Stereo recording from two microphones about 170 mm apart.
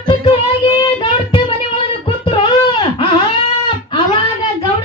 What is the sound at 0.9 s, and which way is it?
Child singing, 30° left (ahead or behind).